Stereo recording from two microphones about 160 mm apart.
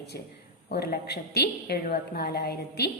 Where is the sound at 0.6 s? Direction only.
75° left (ahead or behind).